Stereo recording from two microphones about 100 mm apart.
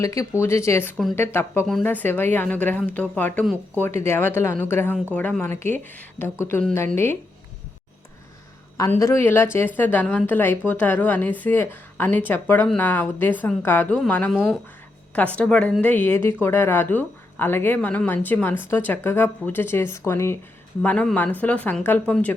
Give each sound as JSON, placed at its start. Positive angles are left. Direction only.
{"t": 0.0, "sound": "a woman's voice", "side_deg": 30}
{"t": 9.0, "sound": "a woman's voice", "side_deg": 25}
{"t": 14.3, "sound": "speech", "side_deg": 0}
{"t": 15.1, "sound": "a woman's voice", "side_deg": 15}
{"t": 20.8, "sound": "a woman's voice", "side_deg": 15}